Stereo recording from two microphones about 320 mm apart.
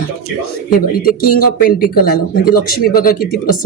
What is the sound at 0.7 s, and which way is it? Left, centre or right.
Speech, left.